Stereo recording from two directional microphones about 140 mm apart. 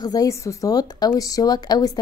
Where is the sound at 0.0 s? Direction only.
25° left (ahead or behind).